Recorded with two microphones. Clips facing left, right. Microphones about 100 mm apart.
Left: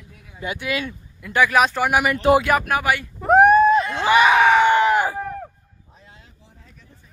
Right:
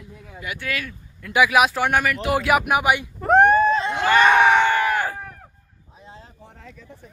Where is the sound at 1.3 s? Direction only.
10° right (ahead or behind).